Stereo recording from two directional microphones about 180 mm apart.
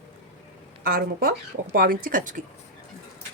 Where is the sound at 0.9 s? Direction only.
55° right (ahead or behind).